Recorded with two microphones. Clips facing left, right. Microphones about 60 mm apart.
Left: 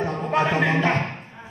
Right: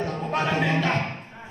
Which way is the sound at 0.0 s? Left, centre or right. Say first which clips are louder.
Left 4 dB; left.